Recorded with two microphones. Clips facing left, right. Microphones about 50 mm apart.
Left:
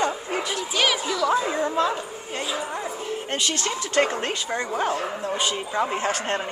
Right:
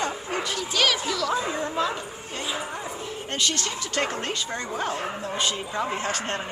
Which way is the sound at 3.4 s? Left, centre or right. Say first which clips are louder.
Even; centre.